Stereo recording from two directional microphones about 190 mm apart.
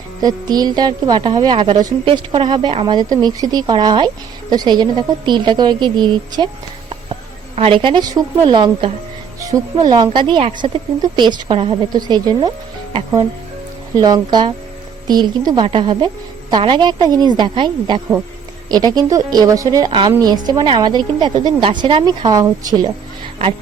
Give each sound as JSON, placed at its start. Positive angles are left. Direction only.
{"t": 0.2, "sound": "a woman's voice", "side_deg": -20}